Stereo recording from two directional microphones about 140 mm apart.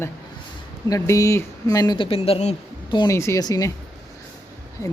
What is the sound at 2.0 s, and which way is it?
Speech, 45° left (ahead or behind).